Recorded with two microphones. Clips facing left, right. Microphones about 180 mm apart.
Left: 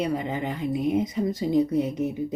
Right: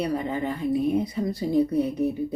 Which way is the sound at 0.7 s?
90° left.